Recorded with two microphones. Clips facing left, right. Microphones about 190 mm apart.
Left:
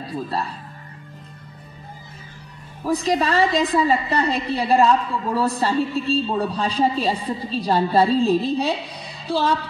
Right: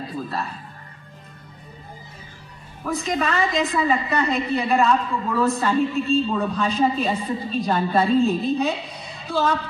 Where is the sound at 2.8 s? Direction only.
35° left (ahead or behind).